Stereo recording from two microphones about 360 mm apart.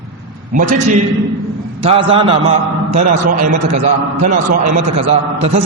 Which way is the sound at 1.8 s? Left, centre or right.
Centre.